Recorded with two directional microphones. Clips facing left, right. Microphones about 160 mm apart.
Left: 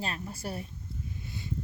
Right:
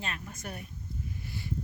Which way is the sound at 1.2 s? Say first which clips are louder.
Right 1 dB; 20° left (ahead or behind).